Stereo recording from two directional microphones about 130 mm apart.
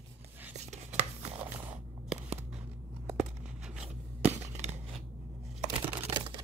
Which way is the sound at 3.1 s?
5° right (ahead or behind).